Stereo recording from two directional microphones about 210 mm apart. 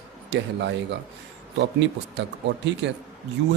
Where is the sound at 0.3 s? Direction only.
55° right (ahead or behind).